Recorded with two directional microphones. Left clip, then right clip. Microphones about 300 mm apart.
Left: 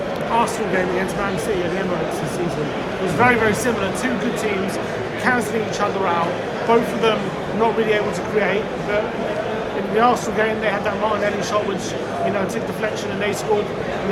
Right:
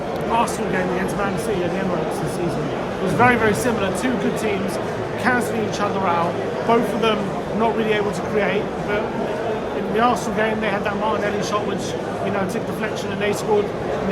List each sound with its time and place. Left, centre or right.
3.2 s speech: centre
6.7 s speech: centre
10.0 s speech: centre